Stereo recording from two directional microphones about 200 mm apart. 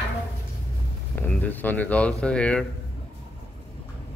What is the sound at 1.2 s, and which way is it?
Speech, 10° left (ahead or behind).